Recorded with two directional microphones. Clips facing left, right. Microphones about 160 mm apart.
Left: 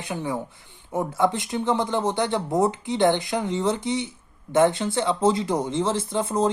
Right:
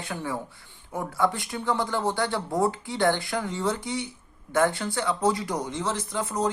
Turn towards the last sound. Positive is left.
turn(degrees=25)  # may be behind; listen again after turning